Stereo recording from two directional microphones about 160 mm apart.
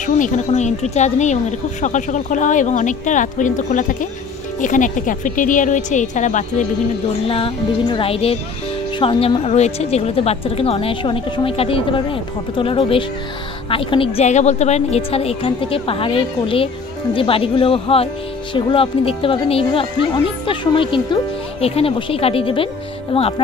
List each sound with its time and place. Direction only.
0.0 s speech: 50° left (ahead or behind)
7.2 s speech: 35° left (ahead or behind)